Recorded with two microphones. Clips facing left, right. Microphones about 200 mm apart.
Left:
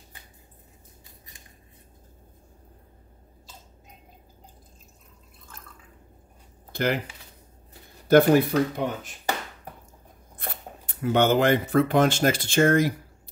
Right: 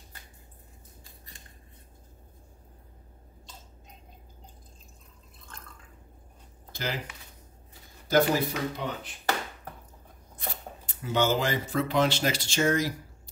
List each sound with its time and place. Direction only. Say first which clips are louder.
6.7 s a sound: left 9 dB; 60° left (ahead or behind)
8.1 s speech: left 7 dB; 60° left (ahead or behind)
10.3 s speech: left 1 dB; 55° left (ahead or behind)